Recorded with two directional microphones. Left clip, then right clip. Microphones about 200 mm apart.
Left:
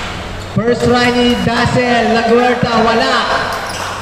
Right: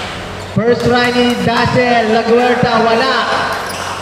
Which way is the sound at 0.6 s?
10° left (ahead or behind).